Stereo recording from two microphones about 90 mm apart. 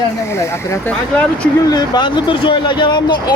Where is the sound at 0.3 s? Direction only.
30° left (ahead or behind).